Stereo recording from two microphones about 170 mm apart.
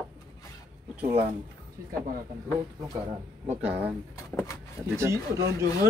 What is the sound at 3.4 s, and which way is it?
Speech, 10° right (ahead or behind).